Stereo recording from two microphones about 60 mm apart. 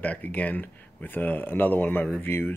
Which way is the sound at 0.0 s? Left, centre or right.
Left.